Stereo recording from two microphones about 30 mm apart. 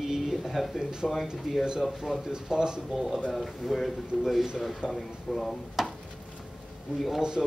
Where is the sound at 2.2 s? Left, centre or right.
Right.